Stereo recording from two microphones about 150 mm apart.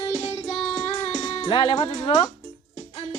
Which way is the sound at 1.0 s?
35° left (ahead or behind).